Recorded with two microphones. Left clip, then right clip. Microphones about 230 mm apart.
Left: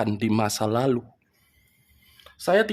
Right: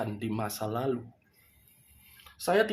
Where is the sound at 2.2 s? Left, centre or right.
Left.